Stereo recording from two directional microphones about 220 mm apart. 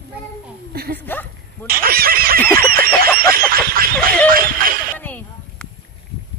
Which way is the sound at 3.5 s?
40° right (ahead or behind).